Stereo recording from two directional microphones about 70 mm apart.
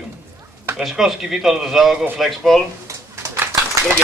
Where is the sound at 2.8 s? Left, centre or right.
Right.